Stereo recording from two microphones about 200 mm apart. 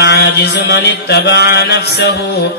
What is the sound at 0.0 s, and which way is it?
Mantra, 60° left (ahead or behind).